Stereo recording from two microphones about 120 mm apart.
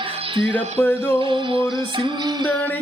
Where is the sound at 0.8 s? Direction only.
20° left (ahead or behind).